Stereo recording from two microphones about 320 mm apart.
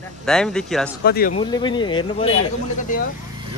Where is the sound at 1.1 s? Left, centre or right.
Left.